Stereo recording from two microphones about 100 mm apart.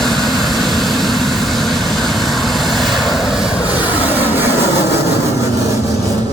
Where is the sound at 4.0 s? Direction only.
20° right (ahead or behind).